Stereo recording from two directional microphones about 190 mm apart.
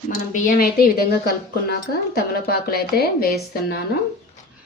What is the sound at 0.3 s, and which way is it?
Speech, 45° left (ahead or behind).